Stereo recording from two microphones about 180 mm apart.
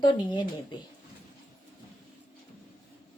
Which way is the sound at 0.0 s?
25° left (ahead or behind).